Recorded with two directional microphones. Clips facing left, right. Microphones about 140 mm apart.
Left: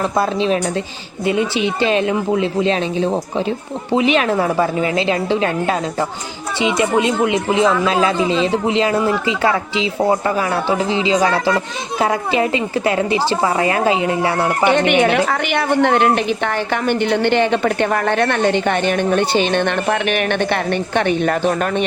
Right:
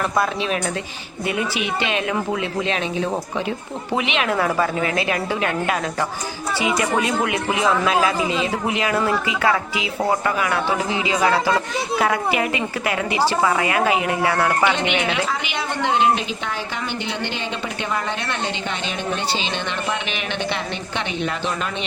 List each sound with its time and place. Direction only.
0.2 s a woman's voice: 30° left (ahead or behind)
14.7 s a woman's voice: 55° left (ahead or behind)